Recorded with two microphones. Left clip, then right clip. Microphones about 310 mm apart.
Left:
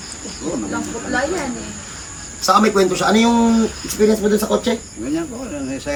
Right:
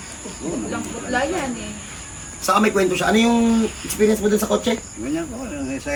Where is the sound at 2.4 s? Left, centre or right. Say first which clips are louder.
Left 4 dB; centre.